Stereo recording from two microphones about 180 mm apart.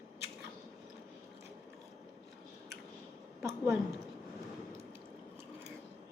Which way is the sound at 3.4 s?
15° right (ahead or behind).